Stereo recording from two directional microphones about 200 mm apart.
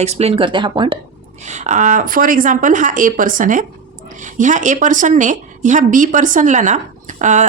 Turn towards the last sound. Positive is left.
turn(degrees=-35)  # may be behind; listen again after turning